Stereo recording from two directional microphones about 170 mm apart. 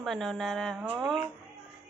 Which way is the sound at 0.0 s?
Centre (ahead or behind).